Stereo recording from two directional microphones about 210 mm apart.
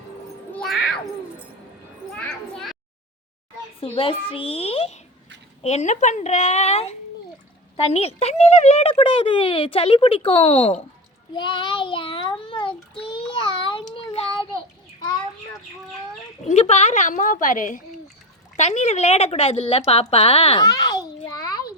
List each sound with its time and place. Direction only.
0.5 s cat: centre (ahead or behind)
2.1 s a sound: 5° left (ahead or behind)
3.8 s a woman's voice: 25° left (ahead or behind)
13.3 s child singing: 25° left (ahead or behind)
16.5 s a woman's voice: 30° left (ahead or behind)
20.7 s a sound: 15° left (ahead or behind)